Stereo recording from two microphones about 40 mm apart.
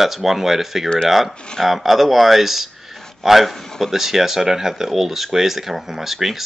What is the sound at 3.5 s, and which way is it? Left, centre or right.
Speech, centre.